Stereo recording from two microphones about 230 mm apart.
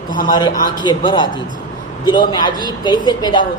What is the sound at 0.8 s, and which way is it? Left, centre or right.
Speech, centre.